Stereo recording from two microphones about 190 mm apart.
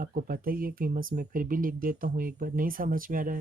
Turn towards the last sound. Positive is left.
turn(degrees=-45)  # may be behind; listen again after turning